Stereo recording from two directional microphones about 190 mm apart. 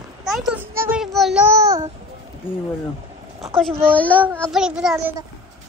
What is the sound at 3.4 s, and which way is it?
Speech, centre (ahead or behind).